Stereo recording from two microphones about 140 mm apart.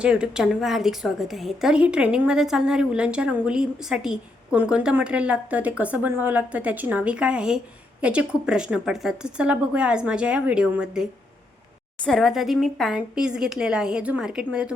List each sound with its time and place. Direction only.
0.0 s a woman's voice: 5° right (ahead or behind)